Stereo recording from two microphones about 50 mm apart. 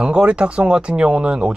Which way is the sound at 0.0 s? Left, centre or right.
Centre.